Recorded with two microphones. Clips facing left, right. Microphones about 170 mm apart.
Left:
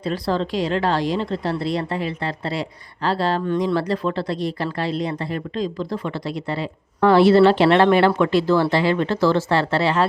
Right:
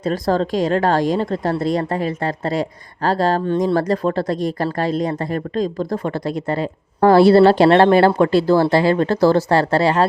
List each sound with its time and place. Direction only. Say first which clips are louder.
0.0 s a woman's voice: right 4 dB; 45° right (ahead or behind)